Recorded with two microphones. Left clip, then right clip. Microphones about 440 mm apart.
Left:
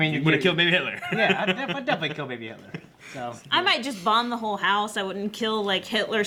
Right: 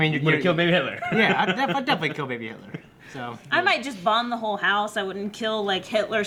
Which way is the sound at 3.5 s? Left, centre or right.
Right.